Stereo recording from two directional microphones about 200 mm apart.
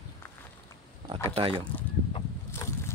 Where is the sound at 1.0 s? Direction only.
30° right (ahead or behind).